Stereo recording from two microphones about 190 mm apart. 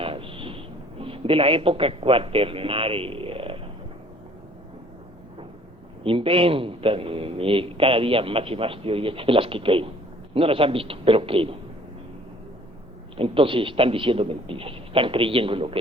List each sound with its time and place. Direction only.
0.0 s a sound: 30° right (ahead or behind)
6.1 s a man's voice: 30° right (ahead or behind)
13.1 s a man's voice: 30° right (ahead or behind)